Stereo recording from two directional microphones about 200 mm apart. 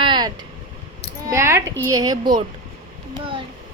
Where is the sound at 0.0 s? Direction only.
20° right (ahead or behind).